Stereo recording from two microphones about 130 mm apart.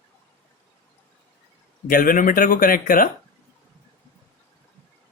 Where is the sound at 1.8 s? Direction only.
90° left.